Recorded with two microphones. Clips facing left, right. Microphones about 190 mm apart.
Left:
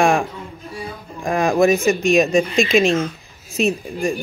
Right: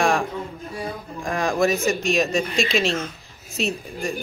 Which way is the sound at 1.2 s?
20° left (ahead or behind).